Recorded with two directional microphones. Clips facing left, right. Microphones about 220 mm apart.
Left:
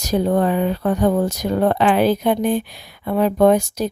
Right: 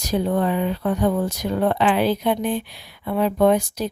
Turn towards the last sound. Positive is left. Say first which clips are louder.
# left 3 dB
turn(degrees=45)  # may be behind; listen again after turning